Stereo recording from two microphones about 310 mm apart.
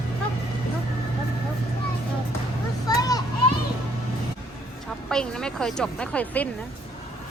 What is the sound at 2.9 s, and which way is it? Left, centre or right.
Children playing, centre.